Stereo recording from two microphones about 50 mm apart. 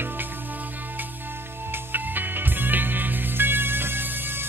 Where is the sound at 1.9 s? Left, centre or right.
Right.